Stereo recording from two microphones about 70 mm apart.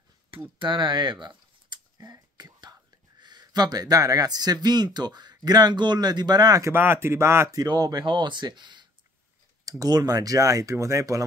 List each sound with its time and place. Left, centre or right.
0.7 s speech: right
2.0 s speech: right
6.7 s speech: right
7.5 s speech: right
9.7 s speech: right